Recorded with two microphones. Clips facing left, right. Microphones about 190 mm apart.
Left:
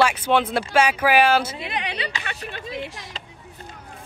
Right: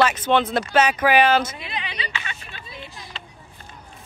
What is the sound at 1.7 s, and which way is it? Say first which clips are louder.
A woman's voice: left 4 dB; 65° left (ahead or behind).